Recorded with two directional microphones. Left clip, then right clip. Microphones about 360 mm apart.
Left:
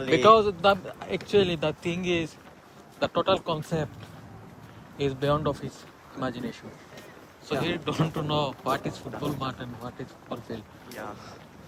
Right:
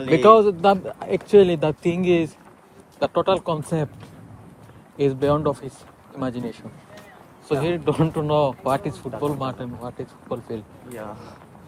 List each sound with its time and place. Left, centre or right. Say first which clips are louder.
0.0 s speech: right 5 dB; centre
4.9 s speech: right 6 dB; centre